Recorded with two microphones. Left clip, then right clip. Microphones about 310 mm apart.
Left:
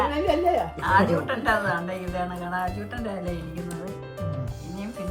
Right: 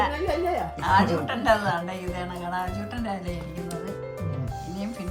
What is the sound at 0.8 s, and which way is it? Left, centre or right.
A woman's voice, centre.